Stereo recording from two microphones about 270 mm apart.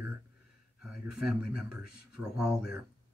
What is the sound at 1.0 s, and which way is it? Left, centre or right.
Speech, right.